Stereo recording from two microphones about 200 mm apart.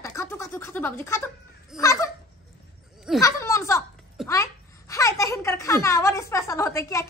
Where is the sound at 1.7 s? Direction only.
15° left (ahead or behind).